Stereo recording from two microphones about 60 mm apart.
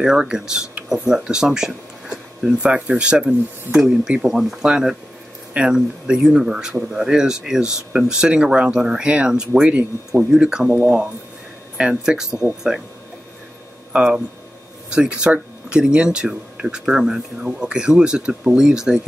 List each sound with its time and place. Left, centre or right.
0.0 s speech: centre
11.7 s speech: centre
13.9 s speech: centre